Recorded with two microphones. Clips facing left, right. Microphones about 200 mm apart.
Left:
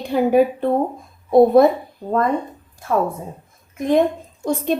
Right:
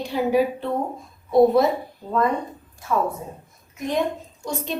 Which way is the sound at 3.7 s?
50° left (ahead or behind).